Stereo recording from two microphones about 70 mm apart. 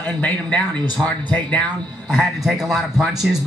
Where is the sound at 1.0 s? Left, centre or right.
Centre.